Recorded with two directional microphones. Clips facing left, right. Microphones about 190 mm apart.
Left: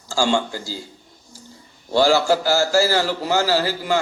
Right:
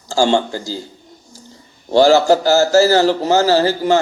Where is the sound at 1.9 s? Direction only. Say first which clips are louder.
Right 6 dB; 40° right (ahead or behind).